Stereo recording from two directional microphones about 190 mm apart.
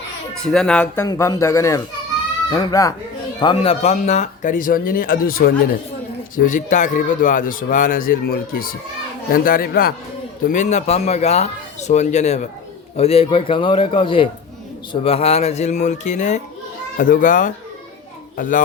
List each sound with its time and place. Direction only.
0.4 s speech: 5° left (ahead or behind)
1.0 s a man's voice: 20° left (ahead or behind); by 18.6 s 45° left (ahead or behind)